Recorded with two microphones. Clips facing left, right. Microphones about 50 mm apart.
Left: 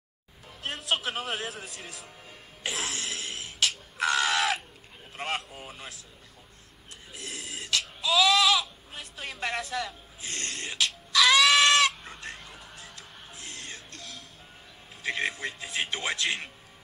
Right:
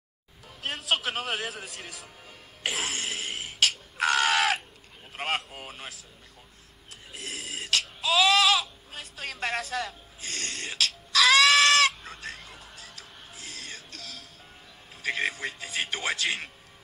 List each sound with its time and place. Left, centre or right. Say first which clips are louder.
0.6 s music: right 2 dB; centre
4.0 s crow: right 2 dB; centre
5.1 s a sound: right 2 dB; centre
7.1 s throat clearing: right 2 dB; centre
15.0 s speech: right 1 dB; centre